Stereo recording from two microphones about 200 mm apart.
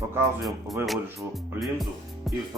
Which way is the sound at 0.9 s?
Centre (ahead or behind).